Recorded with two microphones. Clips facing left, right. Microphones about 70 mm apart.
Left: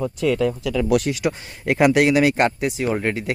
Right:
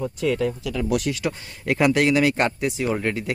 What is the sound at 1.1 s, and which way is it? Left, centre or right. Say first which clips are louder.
Speech: left 4 dB; centre.